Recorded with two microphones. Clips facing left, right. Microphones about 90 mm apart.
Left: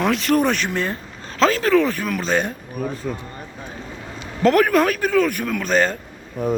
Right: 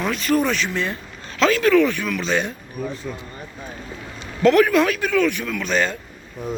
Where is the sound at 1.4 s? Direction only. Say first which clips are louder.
Right 1 dB; 35° left (ahead or behind).